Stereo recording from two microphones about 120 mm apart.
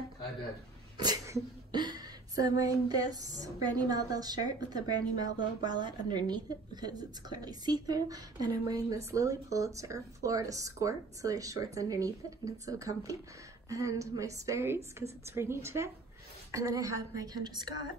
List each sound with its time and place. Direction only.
0.9 s speech: 35° right (ahead or behind)
1.7 s a sound: 35° right (ahead or behind)
13.7 s a woman's voice: 25° right (ahead or behind)